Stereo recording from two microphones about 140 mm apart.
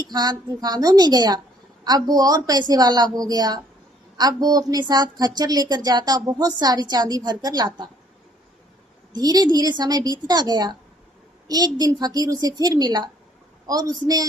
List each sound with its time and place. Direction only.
0.1 s a woman's voice: 30° right (ahead or behind)
9.1 s a woman's voice: 30° right (ahead or behind)